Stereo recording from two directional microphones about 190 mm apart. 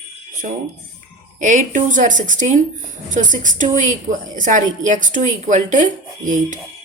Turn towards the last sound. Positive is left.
turn(degrees=-40)  # may be behind; listen again after turning